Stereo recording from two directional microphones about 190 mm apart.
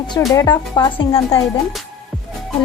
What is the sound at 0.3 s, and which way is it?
A woman's voice, 20° left (ahead or behind).